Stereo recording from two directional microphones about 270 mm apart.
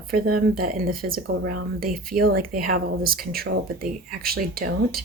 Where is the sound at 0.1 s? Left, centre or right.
Right.